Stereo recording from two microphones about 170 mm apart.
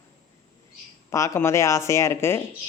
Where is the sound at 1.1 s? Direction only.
15° left (ahead or behind).